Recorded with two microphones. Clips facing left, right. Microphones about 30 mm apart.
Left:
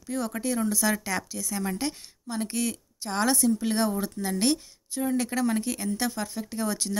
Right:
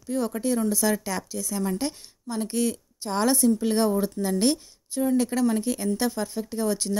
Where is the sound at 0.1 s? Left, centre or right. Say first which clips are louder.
Right 4 dB; centre.